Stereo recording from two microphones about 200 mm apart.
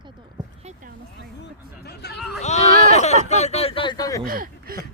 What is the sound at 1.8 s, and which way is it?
Chatter, 55° left (ahead or behind).